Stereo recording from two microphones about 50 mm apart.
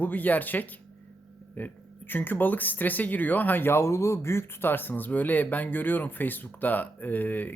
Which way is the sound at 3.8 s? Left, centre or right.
Left.